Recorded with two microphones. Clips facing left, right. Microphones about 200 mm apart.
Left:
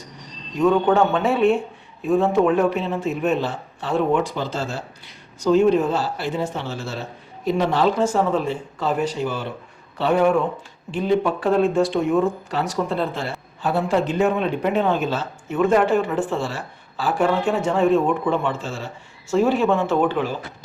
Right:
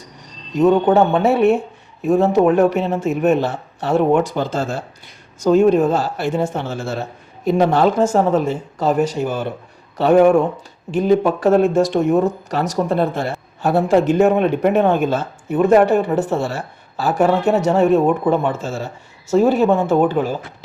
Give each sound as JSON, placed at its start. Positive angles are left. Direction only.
{"t": 0.5, "sound": "a woman's voice", "side_deg": -40}
{"t": 15.5, "sound": "a woman's voice", "side_deg": -40}